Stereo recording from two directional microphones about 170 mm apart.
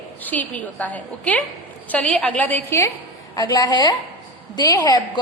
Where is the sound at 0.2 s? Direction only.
10° left (ahead or behind).